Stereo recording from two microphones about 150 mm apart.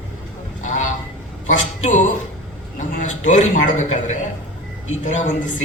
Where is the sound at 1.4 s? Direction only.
55° left (ahead or behind).